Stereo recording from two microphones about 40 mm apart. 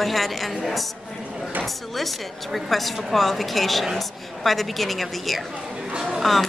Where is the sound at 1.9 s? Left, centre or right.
Centre.